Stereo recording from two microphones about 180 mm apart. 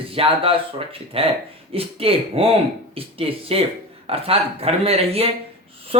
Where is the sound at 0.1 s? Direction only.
30° right (ahead or behind).